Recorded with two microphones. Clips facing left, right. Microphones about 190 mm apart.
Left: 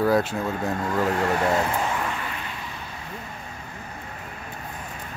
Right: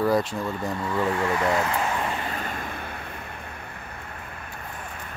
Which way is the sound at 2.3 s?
50° right (ahead or behind).